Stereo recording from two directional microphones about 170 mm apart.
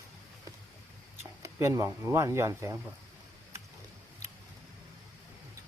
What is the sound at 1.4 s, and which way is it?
Speech, 15° right (ahead or behind).